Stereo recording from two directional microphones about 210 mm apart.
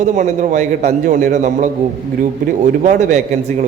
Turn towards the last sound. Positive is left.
turn(degrees=-35)  # may be behind; listen again after turning